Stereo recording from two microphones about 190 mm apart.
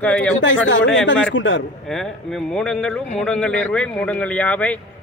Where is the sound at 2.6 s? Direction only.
5° left (ahead or behind).